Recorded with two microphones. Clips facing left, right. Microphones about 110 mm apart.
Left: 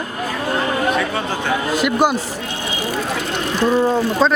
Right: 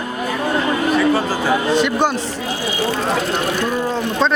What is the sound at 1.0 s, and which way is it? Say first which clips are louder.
Speech: right 5 dB; 5° right (ahead or behind).